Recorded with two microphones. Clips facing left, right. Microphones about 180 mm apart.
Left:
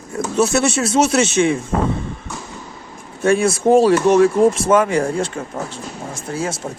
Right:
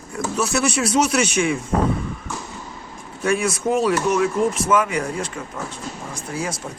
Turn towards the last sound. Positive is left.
turn(degrees=25)  # may be behind; listen again after turning